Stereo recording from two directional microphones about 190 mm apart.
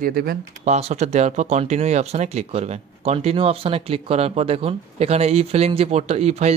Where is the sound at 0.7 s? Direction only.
35° right (ahead or behind).